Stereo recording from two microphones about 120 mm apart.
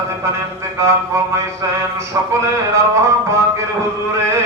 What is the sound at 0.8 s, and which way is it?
Music, 25° right (ahead or behind).